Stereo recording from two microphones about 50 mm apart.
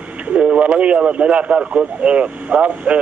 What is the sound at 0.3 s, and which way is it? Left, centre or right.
Speech, right.